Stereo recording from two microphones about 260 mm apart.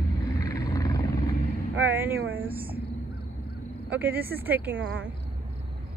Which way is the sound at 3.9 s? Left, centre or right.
Centre.